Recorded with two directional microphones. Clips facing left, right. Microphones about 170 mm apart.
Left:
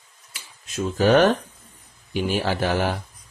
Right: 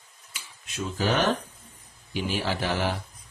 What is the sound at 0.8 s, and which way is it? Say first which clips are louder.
Speech: left 9 dB; 55° left (ahead or behind).